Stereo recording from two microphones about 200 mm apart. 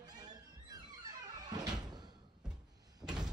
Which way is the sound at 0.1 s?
20° right (ahead or behind).